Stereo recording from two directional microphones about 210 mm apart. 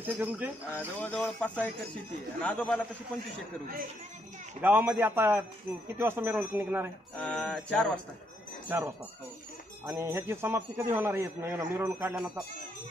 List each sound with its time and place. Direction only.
0.0 s a man's voice: 10° right (ahead or behind)
0.7 s speech: 10° left (ahead or behind)
2.4 s jingle bell: 5° left (ahead or behind)
4.6 s a man's voice: 10° right (ahead or behind)
7.2 s jingle bell: 5° left (ahead or behind)
8.6 s a man's voice: 10° right (ahead or behind)